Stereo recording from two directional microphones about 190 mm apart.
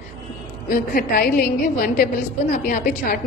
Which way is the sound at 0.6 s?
50° left (ahead or behind).